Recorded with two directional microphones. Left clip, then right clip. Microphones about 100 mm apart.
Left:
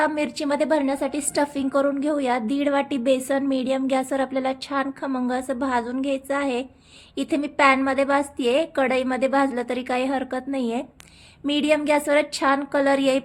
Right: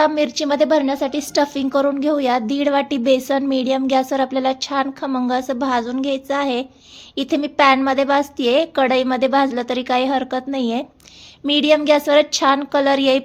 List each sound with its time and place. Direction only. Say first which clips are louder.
0.0 s a woman's voice: right 6 dB; 20° right (ahead or behind)